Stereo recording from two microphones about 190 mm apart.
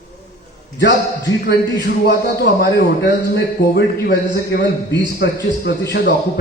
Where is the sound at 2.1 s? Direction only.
55° left (ahead or behind).